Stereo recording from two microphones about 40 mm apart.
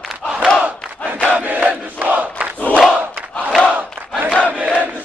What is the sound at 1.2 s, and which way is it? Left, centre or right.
Crowd, right.